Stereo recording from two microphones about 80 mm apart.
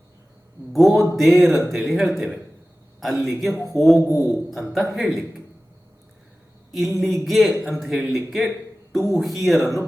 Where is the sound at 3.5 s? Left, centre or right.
Left.